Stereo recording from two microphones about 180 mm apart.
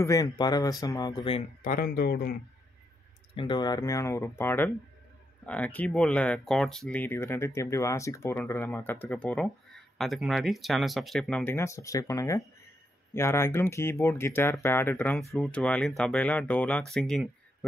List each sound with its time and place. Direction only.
0.0 s speech: 20° left (ahead or behind)
1.6 s speech: 50° left (ahead or behind)
3.3 s speech: 25° left (ahead or behind); by 17.6 s 5° left (ahead or behind)